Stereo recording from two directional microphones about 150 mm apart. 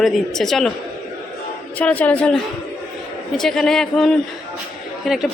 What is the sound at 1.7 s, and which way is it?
Speech, 10° left (ahead or behind).